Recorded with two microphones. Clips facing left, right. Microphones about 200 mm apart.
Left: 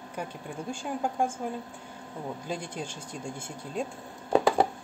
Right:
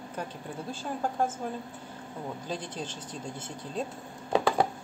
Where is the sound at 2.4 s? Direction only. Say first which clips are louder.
Left 1 dB; 10° left (ahead or behind).